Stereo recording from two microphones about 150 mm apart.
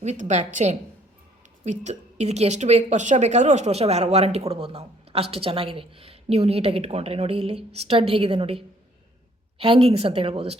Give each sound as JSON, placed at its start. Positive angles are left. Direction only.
{"t": 0.0, "sound": "a woman's voice", "side_deg": -50}